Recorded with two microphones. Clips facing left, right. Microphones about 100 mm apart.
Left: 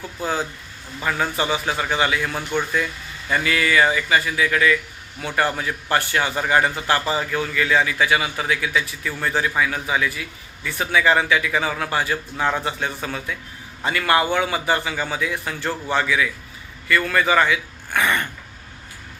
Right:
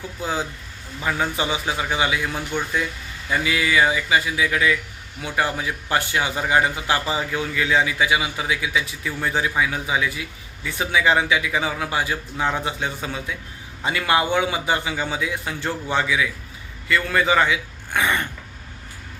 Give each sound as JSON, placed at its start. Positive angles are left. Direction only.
{"t": 1.0, "sound": "a man's voice", "side_deg": -15}